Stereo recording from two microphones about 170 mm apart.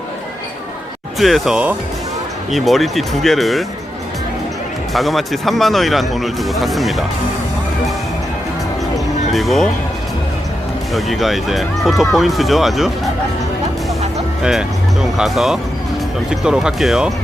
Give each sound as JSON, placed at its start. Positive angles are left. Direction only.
{"t": 1.2, "sound": "speech", "side_deg": 0}
{"t": 4.9, "sound": "speech", "side_deg": 0}
{"t": 9.3, "sound": "speech", "side_deg": 0}
{"t": 10.9, "sound": "speech", "side_deg": 0}
{"t": 15.2, "sound": "speech", "side_deg": 0}